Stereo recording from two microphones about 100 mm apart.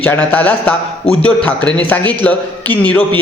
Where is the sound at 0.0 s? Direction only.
15° left (ahead or behind).